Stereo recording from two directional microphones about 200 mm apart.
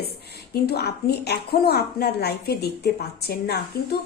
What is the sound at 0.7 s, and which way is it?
A woman's voice, 50° left (ahead or behind).